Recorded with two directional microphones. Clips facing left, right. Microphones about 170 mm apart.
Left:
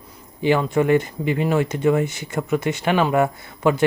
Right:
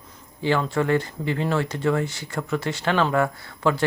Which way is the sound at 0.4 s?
15° left (ahead or behind).